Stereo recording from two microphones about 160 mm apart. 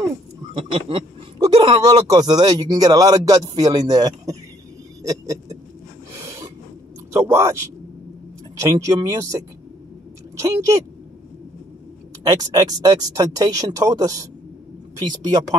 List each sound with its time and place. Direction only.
0.7 s speech: 35° right (ahead or behind)
5.0 s a sound: 20° right (ahead or behind)
7.1 s speech: 15° right (ahead or behind)
8.5 s speech: 20° right (ahead or behind)
12.2 s speech: 25° right (ahead or behind)